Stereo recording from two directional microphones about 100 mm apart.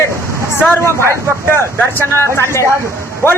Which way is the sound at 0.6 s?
20° left (ahead or behind).